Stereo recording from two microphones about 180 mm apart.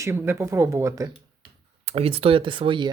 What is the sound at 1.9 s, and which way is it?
Speech, 35° right (ahead or behind).